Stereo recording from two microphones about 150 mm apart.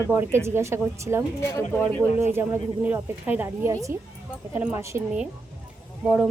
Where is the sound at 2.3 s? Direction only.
15° right (ahead or behind).